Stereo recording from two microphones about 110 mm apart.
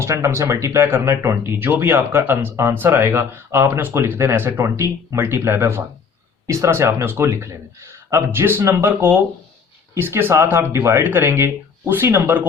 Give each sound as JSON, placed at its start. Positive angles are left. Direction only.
{"t": 0.0, "sound": "speech", "side_deg": -25}